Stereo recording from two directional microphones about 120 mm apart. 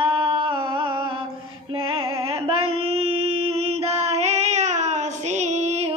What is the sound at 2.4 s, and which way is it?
Child singing, 55° right (ahead or behind).